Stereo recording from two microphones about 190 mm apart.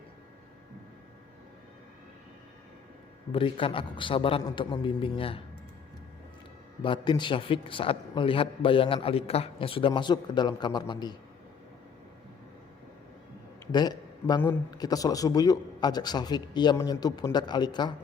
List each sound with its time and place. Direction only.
3.3 s a man's voice: 25° left (ahead or behind)
6.8 s a man's voice: 25° left (ahead or behind)
13.7 s a man's voice: 20° left (ahead or behind)